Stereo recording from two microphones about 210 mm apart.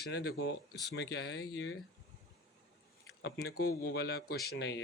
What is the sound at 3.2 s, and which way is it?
A man's voice, 55° left (ahead or behind).